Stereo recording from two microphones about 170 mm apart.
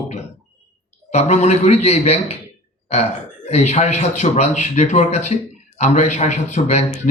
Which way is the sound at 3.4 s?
40° left (ahead or behind).